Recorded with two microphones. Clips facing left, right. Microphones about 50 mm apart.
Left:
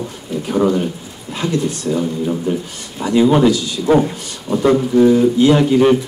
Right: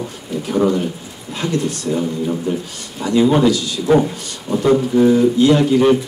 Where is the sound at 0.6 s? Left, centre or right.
Centre.